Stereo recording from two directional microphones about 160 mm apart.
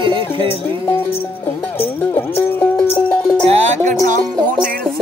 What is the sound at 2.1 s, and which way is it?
Music, 10° left (ahead or behind).